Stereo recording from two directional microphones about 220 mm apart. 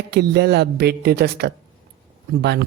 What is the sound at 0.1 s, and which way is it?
Speech, 50° right (ahead or behind).